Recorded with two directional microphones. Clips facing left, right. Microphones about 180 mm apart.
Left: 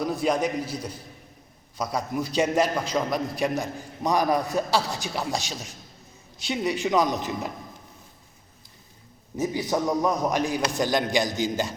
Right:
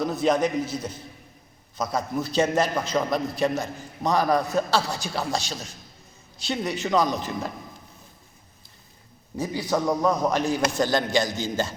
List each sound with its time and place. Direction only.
0.0 s a man's voice: 10° left (ahead or behind)
1.8 s a man's voice: 15° left (ahead or behind)
9.4 s a man's voice: 20° left (ahead or behind)